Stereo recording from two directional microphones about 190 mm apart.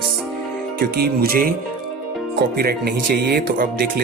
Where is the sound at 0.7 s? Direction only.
55° right (ahead or behind).